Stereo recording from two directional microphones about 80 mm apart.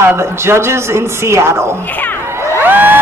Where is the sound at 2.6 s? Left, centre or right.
Right.